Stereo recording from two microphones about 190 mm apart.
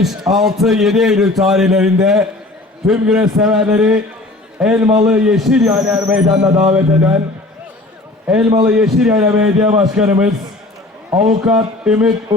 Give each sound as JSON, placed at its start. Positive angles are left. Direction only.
{"t": 0.0, "sound": "a man's voice", "side_deg": 0}
{"t": 4.6, "sound": "music", "side_deg": -5}
{"t": 5.0, "sound": "a man's voice", "side_deg": -5}
{"t": 6.3, "sound": "speech", "side_deg": -20}
{"t": 6.7, "sound": "music", "side_deg": -5}
{"t": 8.3, "sound": "a man's voice", "side_deg": -5}
{"t": 11.4, "sound": "a man's voice", "side_deg": -5}